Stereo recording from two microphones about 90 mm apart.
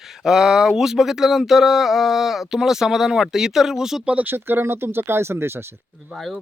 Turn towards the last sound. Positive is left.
turn(degrees=0)  # may be behind; listen again after turning